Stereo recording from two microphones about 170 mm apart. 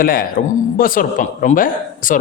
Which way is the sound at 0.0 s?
60° left (ahead or behind).